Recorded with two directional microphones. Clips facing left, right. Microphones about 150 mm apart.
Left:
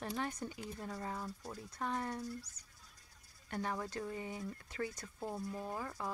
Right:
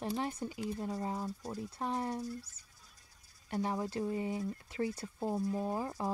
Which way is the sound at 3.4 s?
20° right (ahead or behind).